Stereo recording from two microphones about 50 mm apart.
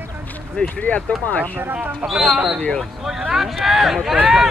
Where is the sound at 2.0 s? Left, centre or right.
Centre.